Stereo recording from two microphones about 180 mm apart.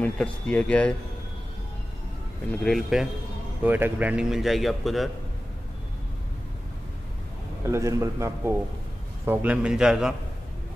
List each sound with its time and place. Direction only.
0.0 s speech: 5° left (ahead or behind)
2.6 s speech: centre (ahead or behind)
7.6 s a man's voice: 15° right (ahead or behind)